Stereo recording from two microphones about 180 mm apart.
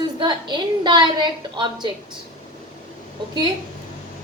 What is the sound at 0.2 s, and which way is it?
A woman's voice, 25° right (ahead or behind).